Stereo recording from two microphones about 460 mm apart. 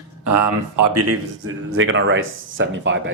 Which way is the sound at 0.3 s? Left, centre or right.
Right.